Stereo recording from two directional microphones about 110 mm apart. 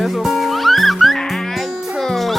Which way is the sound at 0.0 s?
Centre (ahead or behind).